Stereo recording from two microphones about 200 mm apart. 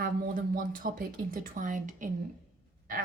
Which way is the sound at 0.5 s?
45° right (ahead or behind).